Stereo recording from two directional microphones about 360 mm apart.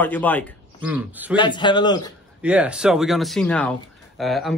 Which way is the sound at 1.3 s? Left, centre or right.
Centre.